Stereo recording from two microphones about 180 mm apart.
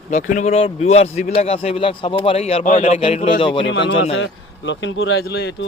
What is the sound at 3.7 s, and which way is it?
Speech, 80° left.